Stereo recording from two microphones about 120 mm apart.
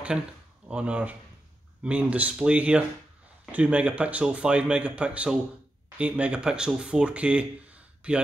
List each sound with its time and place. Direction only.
0.7 s speech: 10° right (ahead or behind)